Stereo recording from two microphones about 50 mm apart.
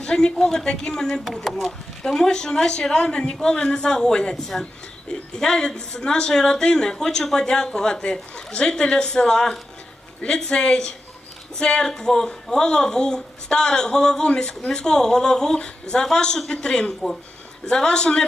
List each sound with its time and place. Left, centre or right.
0.0 s a woman's voice: centre